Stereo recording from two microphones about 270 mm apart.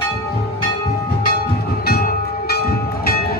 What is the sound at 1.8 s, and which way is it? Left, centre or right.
Train, left.